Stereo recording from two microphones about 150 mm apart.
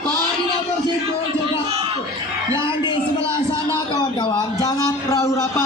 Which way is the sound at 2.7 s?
35° left (ahead or behind).